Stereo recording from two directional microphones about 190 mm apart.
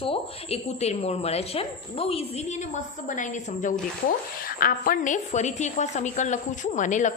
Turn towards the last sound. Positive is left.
turn(degrees=40)  # may be behind; listen again after turning